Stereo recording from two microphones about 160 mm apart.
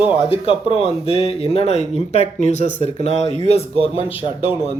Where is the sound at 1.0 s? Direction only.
35° left (ahead or behind).